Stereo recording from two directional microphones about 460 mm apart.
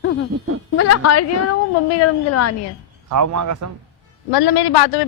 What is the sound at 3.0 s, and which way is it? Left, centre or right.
Speech, right.